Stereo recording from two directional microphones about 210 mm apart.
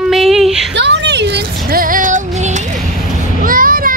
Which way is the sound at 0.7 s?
55° right (ahead or behind).